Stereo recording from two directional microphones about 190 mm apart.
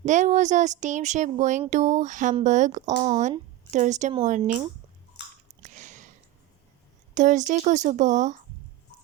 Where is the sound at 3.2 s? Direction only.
40° right (ahead or behind).